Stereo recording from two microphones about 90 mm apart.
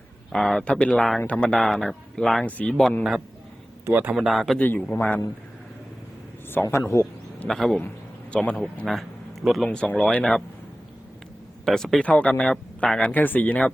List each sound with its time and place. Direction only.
0.3 s speech: 5° left (ahead or behind)
4.1 s speech: 5° right (ahead or behind)
4.5 s speech: 15° left (ahead or behind)
6.5 s a man's voice: 25° left (ahead or behind)
7.4 s speech: 5° left (ahead or behind)
9.6 s speech: 15° left (ahead or behind)
11.6 s speech: 5° left (ahead or behind); by 13.7 s 20° left (ahead or behind)